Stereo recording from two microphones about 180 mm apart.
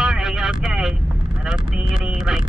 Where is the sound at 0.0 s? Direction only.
5° right (ahead or behind).